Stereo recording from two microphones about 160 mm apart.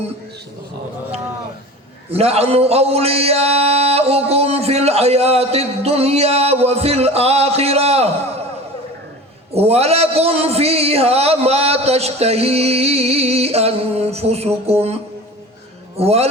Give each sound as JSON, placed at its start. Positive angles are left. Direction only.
{"t": 2.0, "sound": "a man's voice", "side_deg": -40}
{"t": 9.5, "sound": "a man's voice", "side_deg": -40}
{"t": 16.0, "sound": "a man's voice", "side_deg": -40}